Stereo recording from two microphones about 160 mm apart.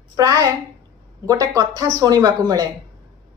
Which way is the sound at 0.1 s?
20° right (ahead or behind).